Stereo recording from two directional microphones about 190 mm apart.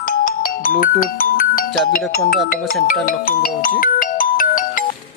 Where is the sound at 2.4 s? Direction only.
50° left (ahead or behind).